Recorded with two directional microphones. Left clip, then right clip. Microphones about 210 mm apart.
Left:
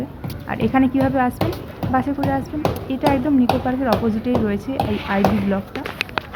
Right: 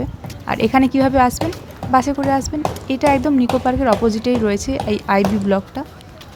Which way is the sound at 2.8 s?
35° right (ahead or behind).